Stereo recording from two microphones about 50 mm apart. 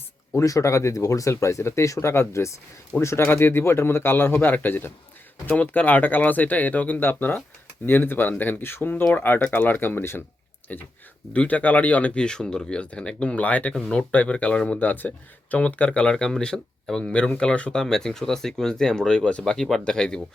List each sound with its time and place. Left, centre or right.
0.3 s speech: left
3.2 s a man's voice: left
10.7 s speech: left
12.1 s speech: centre
12.8 s speech: left
14.8 s speech: left
15.5 s speech: left
17.7 s speech: centre